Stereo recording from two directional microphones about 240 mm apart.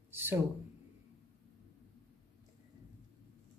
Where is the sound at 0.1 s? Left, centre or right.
Centre.